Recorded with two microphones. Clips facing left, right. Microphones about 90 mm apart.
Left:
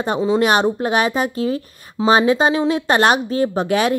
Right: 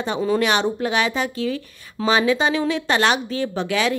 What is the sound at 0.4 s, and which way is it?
A woman's voice, 45° left (ahead or behind).